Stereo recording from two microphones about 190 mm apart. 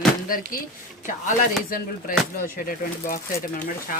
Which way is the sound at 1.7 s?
45° left (ahead or behind).